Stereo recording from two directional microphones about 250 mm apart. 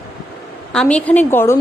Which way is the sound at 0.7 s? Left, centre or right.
Centre.